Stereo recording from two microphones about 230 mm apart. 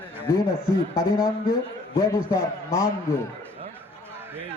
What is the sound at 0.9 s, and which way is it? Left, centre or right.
Speech, left.